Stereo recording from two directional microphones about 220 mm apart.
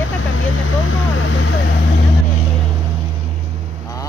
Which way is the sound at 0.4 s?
65° left (ahead or behind).